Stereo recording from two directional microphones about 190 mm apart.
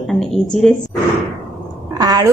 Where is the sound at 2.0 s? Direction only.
20° right (ahead or behind).